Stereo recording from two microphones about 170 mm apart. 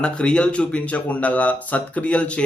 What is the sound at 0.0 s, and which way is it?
Speech, 5° left (ahead or behind).